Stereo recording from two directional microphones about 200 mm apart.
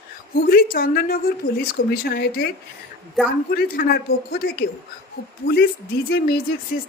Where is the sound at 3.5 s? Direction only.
50° left (ahead or behind).